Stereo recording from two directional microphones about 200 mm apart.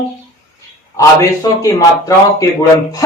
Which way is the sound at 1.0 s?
15° left (ahead or behind).